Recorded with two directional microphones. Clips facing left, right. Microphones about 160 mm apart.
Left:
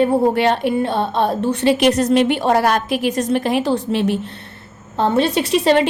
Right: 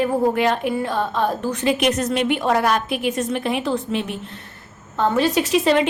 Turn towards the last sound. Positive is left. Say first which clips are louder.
# left 2 dB
turn(degrees=30)  # may be behind; listen again after turning